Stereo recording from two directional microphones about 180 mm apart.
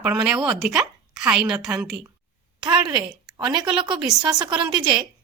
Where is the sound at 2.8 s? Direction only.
25° right (ahead or behind).